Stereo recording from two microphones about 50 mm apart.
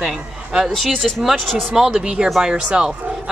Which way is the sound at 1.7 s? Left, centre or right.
Centre.